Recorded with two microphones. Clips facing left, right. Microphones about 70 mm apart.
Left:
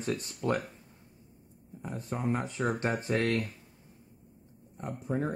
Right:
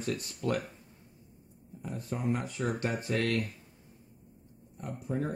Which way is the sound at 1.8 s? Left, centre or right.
Left.